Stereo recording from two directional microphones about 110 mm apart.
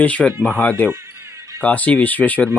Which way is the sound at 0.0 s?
10° left (ahead or behind).